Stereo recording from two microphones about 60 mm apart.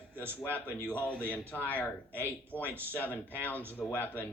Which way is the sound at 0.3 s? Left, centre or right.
Left.